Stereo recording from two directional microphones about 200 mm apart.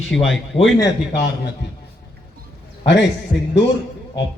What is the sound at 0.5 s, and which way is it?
Speech, 35° left (ahead or behind).